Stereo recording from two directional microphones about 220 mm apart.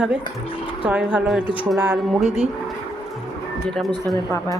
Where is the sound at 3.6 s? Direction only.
Centre (ahead or behind).